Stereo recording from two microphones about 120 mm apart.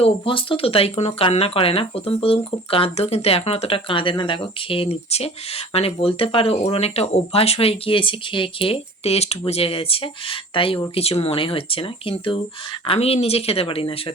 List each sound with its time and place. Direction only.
0.0 s speech: 45° left (ahead or behind)